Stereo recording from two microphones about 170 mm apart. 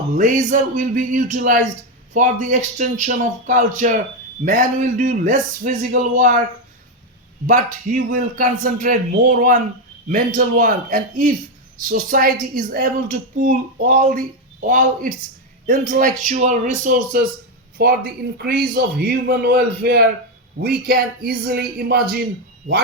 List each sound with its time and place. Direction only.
0.2 s a woman's voice: 50° right (ahead or behind)
7.4 s a woman's voice: 55° right (ahead or behind)